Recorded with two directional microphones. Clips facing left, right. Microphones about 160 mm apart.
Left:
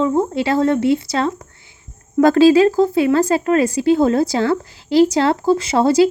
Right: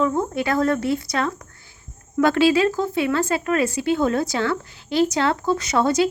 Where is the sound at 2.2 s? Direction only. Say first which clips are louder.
Left 6 dB; 40° left (ahead or behind).